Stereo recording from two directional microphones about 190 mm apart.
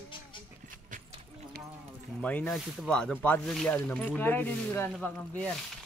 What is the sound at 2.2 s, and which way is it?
Speech, 5° left (ahead or behind).